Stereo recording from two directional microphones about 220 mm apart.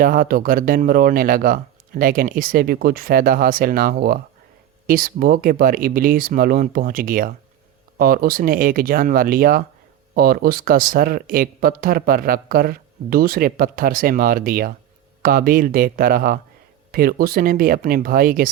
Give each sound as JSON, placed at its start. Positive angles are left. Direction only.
{"t": 0.0, "sound": "speech", "side_deg": -40}